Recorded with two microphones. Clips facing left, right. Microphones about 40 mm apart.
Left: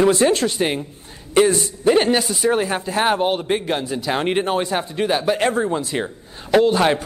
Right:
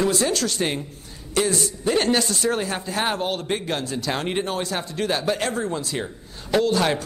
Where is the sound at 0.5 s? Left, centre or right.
Centre.